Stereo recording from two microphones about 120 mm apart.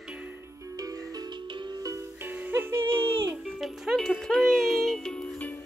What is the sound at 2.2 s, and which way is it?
Music, 15° right (ahead or behind).